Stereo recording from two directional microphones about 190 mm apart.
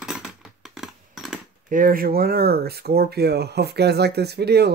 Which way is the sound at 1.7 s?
45° right (ahead or behind).